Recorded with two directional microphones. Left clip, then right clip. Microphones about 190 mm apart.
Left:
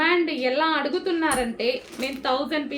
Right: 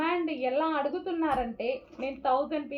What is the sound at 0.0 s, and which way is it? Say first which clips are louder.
A woman's voice: left 7 dB; 20° left (ahead or behind).